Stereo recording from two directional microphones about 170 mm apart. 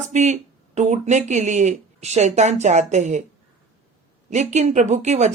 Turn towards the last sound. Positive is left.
turn(degrees=-45)  # may be behind; listen again after turning